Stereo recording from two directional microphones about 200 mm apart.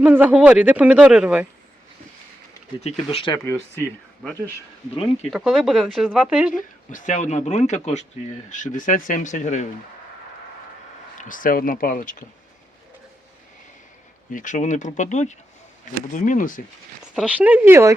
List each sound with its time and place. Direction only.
0.0 s speech: 10° right (ahead or behind)
2.8 s speech: 30° left (ahead or behind)
4.9 s speech: 30° left (ahead or behind)
5.3 s speech: centre (ahead or behind)
6.5 s speech: 40° left (ahead or behind)
11.2 s speech: 40° left (ahead or behind)
14.3 s speech: 40° left (ahead or behind)
17.2 s speech: 5° right (ahead or behind)